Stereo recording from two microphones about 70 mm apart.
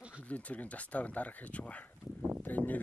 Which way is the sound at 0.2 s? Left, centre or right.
Centre.